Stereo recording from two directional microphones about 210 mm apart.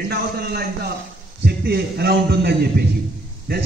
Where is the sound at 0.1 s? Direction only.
50° right (ahead or behind).